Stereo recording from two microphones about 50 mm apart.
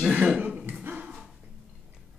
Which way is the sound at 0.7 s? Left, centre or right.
Right.